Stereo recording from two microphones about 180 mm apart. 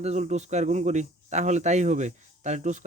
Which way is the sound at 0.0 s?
40° right (ahead or behind).